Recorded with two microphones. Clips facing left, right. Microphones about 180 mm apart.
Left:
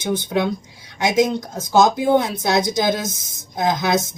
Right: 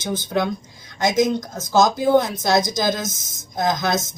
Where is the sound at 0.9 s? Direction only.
60° left (ahead or behind).